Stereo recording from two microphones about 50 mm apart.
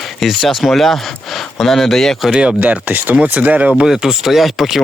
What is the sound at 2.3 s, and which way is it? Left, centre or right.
Speech, right.